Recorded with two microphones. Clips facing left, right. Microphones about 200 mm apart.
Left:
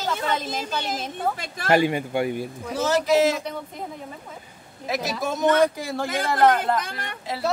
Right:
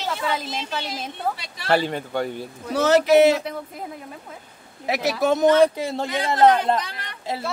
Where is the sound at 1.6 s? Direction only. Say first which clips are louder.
Left 2 dB; 10° left (ahead or behind).